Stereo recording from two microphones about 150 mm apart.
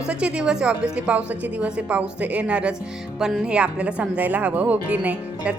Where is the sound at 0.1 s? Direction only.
5° right (ahead or behind).